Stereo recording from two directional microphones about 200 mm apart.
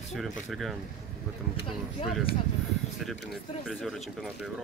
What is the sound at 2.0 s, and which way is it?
Speech, 35° left (ahead or behind).